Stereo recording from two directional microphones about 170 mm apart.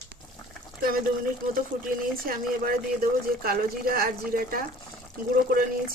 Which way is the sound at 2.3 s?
60° right (ahead or behind).